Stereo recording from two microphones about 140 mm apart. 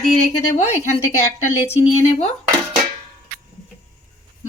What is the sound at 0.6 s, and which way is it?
A woman's voice, 50° left (ahead or behind).